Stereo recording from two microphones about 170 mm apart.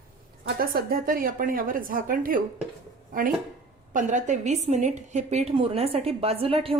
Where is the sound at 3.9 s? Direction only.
50° right (ahead or behind).